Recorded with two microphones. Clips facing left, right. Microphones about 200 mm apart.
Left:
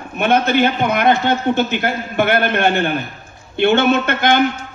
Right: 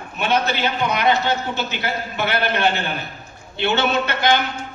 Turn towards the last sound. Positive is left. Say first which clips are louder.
# left 4 dB
turn(degrees=50)  # may be behind; listen again after turning